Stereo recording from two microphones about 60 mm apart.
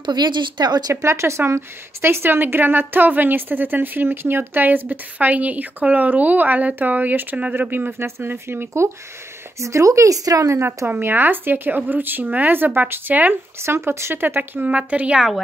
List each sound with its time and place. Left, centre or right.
1.0 s a woman's voice: right
9.6 s speech: right
10.5 s speech: right
10.9 s a woman's voice: right
13.6 s a woman's voice: right
14.7 s a woman's voice: right
15.1 s a woman's voice: centre